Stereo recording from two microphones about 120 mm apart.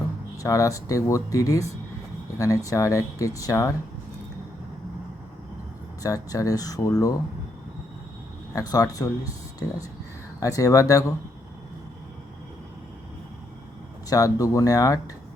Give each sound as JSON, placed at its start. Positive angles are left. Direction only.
{"t": 0.3, "sound": "speech", "side_deg": 30}
{"t": 6.0, "sound": "speech", "side_deg": 30}
{"t": 8.5, "sound": "speech", "side_deg": 30}
{"t": 14.1, "sound": "speech", "side_deg": 30}